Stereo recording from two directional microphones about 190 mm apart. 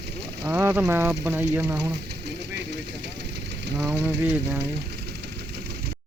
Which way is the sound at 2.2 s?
65° right (ahead or behind).